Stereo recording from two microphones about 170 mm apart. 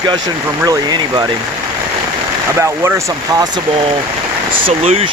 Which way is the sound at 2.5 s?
15° right (ahead or behind).